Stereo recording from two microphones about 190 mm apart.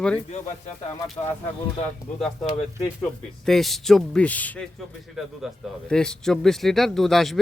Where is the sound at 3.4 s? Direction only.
Centre (ahead or behind).